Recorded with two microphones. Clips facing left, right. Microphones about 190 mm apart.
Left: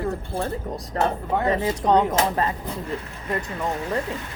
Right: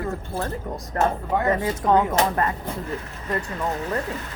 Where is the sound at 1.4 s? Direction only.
20° left (ahead or behind).